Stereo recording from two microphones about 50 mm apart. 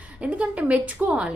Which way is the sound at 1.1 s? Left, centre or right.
Centre.